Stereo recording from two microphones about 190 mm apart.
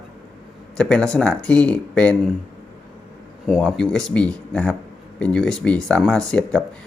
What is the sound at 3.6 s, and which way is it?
Speech, 5° left (ahead or behind).